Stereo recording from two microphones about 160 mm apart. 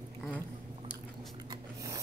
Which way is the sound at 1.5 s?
20° right (ahead or behind).